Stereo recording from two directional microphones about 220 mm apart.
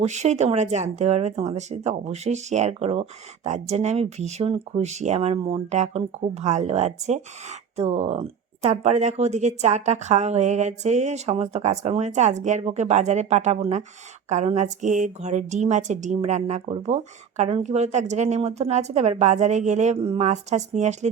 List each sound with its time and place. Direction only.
0.0 s speech: 30° right (ahead or behind)